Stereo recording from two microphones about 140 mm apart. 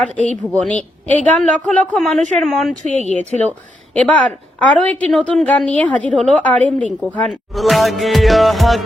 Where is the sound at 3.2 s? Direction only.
55° right (ahead or behind).